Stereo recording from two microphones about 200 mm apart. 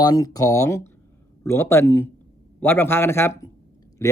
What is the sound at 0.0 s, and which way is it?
Speech, 20° left (ahead or behind).